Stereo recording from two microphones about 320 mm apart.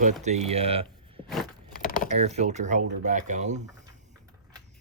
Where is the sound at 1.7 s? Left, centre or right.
Left.